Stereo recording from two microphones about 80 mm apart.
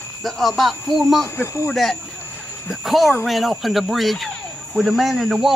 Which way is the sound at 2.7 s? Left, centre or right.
Centre.